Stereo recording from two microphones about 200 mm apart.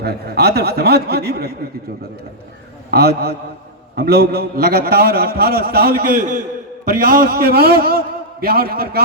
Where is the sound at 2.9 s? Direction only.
50° right (ahead or behind).